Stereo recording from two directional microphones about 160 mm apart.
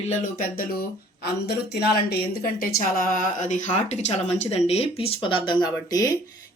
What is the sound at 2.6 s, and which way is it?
Speech, 65° left (ahead or behind).